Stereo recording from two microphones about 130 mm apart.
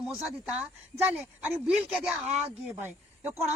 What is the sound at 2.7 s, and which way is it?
Speech, 15° right (ahead or behind).